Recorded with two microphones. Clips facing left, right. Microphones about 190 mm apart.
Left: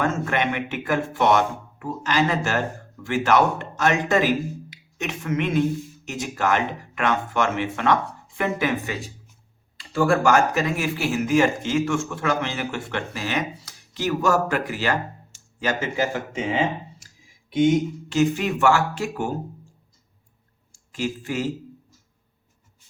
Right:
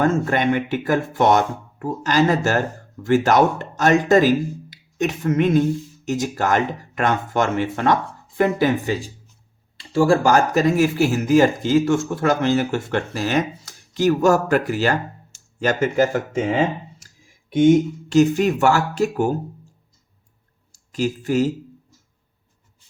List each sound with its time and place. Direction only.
0.0 s a woman's voice: 35° right (ahead or behind)
20.7 s speech: 40° right (ahead or behind)